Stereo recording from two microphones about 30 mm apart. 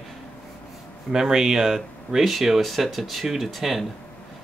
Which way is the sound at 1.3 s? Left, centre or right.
Right.